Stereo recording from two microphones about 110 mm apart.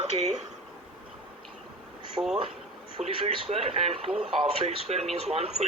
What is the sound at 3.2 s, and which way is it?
Speech, 70° right (ahead or behind).